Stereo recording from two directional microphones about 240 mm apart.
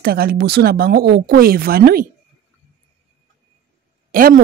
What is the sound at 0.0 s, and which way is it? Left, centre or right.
Speech, right.